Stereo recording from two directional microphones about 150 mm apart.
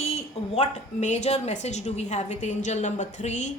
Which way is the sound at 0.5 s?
50° left (ahead or behind).